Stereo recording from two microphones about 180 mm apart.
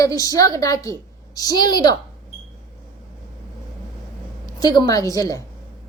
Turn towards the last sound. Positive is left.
turn(degrees=20)  # may be behind; listen again after turning